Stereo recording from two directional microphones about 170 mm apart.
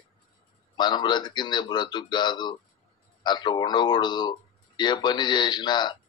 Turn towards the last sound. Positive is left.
turn(degrees=25)  # may be behind; listen again after turning